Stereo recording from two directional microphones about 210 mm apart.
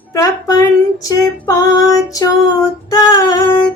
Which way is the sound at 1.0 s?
15° left (ahead or behind).